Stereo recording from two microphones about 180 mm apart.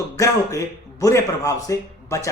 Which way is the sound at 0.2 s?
20° left (ahead or behind).